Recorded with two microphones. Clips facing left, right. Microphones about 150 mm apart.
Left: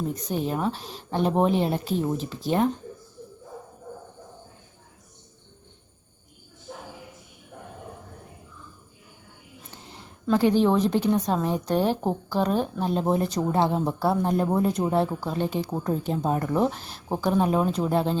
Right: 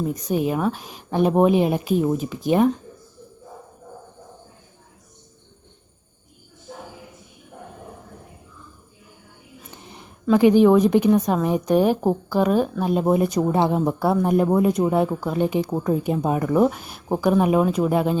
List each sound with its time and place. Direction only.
0.1 s speech: 10° right (ahead or behind)
9.7 s a sound: 15° right (ahead or behind)
10.3 s speech: 15° right (ahead or behind)